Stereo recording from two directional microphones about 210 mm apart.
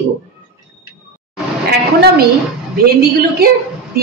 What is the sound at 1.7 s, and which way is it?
Speech, 50° right (ahead or behind).